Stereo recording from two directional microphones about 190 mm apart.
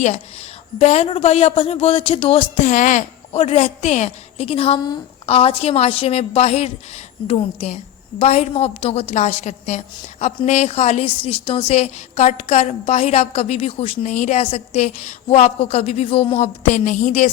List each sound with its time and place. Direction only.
0.8 s a woman's voice: 35° left (ahead or behind)